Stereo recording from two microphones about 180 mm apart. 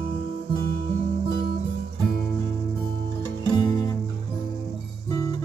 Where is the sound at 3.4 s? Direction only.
25° left (ahead or behind).